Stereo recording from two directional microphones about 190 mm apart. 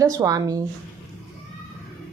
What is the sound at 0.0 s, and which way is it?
Speech, 20° right (ahead or behind).